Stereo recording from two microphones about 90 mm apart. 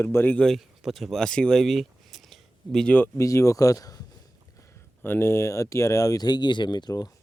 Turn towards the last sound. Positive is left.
turn(degrees=50)  # may be behind; listen again after turning